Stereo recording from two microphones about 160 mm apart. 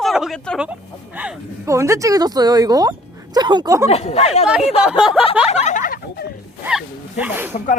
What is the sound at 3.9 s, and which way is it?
Speech, 40° left (ahead or behind).